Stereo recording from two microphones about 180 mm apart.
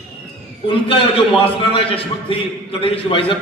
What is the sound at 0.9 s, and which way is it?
A man's voice, 30° left (ahead or behind).